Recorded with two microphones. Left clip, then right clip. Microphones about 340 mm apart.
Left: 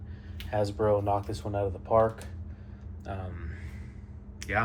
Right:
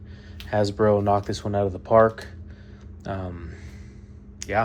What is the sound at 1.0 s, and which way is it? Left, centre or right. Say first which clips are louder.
Speech: right 7 dB; right.